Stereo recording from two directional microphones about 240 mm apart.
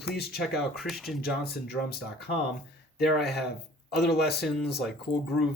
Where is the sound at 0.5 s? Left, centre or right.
Centre.